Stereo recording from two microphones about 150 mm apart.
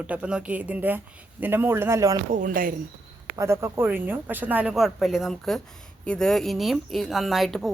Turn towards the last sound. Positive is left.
turn(degrees=0)  # may be behind; listen again after turning